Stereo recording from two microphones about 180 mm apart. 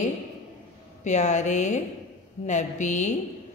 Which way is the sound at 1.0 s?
40° left (ahead or behind).